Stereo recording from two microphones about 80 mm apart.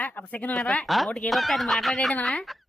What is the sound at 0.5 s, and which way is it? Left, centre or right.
Speech, centre.